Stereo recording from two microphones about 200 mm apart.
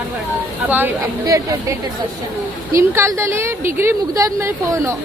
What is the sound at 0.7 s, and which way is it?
Speech, 15° right (ahead or behind).